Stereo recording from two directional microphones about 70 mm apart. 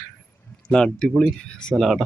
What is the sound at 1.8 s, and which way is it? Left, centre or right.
Speech, centre.